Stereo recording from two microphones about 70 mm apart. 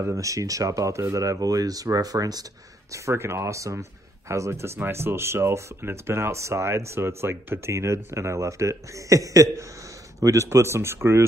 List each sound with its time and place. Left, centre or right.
0.1 s speech: right
2.9 s speech: right